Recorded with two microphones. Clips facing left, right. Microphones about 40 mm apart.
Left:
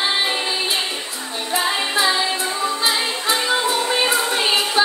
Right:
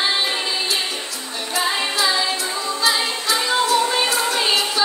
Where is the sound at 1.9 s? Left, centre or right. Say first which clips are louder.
Left 1 dB; left.